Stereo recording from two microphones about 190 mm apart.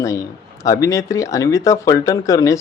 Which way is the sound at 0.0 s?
15° left (ahead or behind).